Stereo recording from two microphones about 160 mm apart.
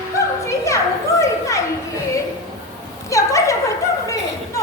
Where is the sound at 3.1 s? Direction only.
20° left (ahead or behind).